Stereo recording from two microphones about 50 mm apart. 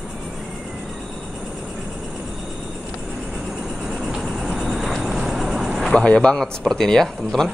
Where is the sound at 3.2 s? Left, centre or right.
Centre.